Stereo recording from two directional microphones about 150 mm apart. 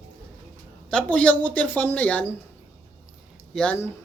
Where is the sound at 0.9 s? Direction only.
10° left (ahead or behind).